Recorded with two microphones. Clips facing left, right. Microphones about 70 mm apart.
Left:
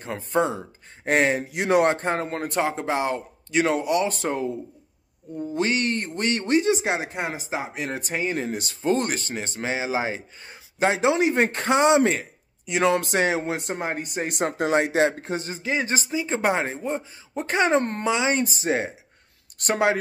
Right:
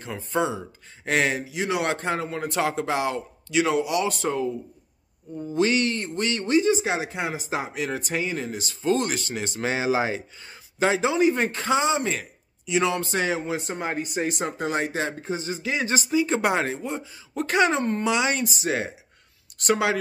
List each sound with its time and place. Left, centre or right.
0.0 s a man's voice: left
1.4 s a man's voice: left
2.7 s a man's voice: left
5.5 s a man's voice: left
7.4 s speech: left
7.7 s a man's voice: left
9.6 s speech: left
10.8 s a man's voice: left
11.1 s speech: left
11.4 s a man's voice: left
15.6 s a man's voice: left
16.1 s speech: left
17.7 s a man's voice: left
18.0 s a man's voice: left